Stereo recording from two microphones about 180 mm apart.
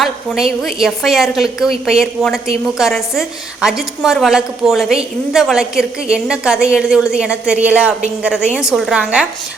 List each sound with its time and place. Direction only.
0.0 s a woman's voice: centre (ahead or behind)